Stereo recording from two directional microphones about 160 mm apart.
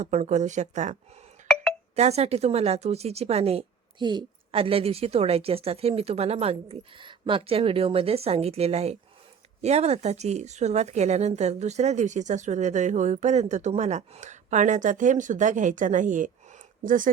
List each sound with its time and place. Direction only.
0.0 s speech: 45° right (ahead or behind)
2.0 s a woman's voice: 40° right (ahead or behind)
4.0 s a woman's voice: 30° right (ahead or behind); by 17.1 s 55° right (ahead or behind)